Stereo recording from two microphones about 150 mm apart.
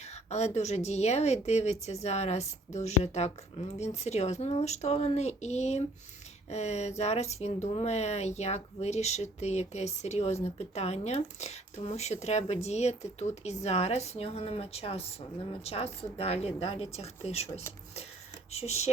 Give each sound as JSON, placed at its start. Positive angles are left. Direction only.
{"t": 0.3, "sound": "speech", "side_deg": 45}